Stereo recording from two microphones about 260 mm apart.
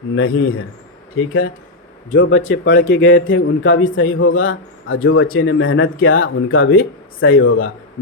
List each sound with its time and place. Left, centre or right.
0.2 s a man's voice: left